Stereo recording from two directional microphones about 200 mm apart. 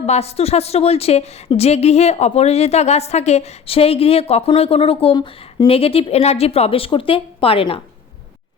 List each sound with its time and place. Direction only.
0.0 s a woman's voice: 30° left (ahead or behind)